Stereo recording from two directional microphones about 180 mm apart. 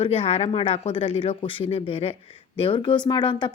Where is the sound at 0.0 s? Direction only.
35° left (ahead or behind).